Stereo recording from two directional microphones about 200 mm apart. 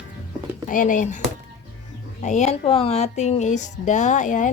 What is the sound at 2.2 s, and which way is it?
A woman's voice, 35° left (ahead or behind).